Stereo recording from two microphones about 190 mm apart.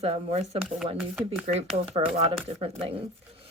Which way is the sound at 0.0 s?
35° right (ahead or behind).